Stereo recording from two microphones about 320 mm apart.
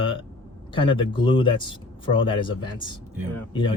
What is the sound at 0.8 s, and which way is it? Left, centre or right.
Speech, centre.